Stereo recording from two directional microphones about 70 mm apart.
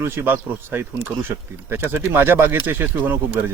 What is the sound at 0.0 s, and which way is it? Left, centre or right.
Speech, right.